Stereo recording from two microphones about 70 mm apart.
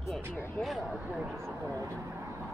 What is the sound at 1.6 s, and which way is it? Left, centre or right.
Vehicle, right.